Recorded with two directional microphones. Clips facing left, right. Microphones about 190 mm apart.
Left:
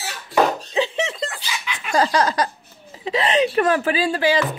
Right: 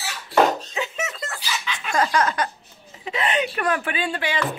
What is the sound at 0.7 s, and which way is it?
Music, 30° left (ahead or behind).